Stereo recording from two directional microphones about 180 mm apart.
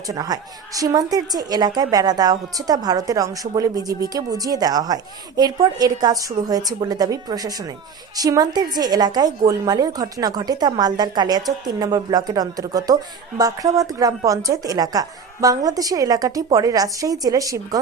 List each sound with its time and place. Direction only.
0.1 s a woman's voice: 20° right (ahead or behind)